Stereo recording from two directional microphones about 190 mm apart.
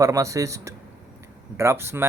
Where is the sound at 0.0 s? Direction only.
15° right (ahead or behind).